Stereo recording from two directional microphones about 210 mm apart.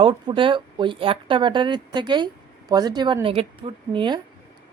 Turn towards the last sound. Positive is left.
turn(degrees=-25)  # may be behind; listen again after turning